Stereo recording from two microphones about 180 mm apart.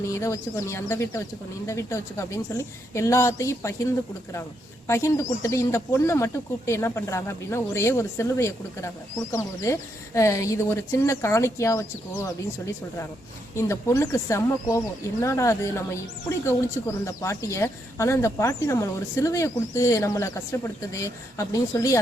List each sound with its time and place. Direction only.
0.0 s speech: 15° left (ahead or behind)
4.9 s speech: 15° left (ahead or behind)
13.6 s speech: 15° left (ahead or behind)